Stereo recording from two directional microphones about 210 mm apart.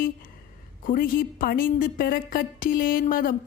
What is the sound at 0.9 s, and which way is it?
A woman's voice, 45° left (ahead or behind).